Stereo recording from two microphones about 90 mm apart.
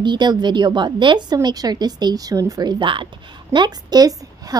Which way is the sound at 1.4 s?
45° right (ahead or behind).